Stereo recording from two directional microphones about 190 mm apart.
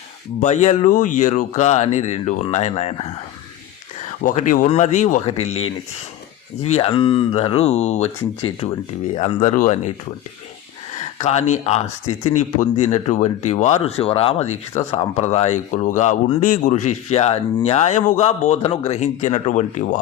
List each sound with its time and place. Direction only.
0.3 s speech: 40° left (ahead or behind)
4.2 s speech: 40° left (ahead or behind)
6.6 s speech: 30° left (ahead or behind)
11.2 s speech: 35° left (ahead or behind)